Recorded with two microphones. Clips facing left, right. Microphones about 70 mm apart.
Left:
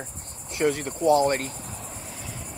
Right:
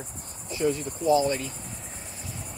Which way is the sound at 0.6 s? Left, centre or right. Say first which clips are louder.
Left 2 dB; left.